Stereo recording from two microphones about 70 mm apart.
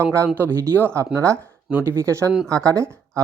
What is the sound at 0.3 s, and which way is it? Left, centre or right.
Speech, right.